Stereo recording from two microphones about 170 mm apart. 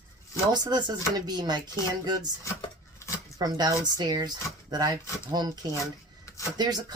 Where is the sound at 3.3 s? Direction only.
20° right (ahead or behind).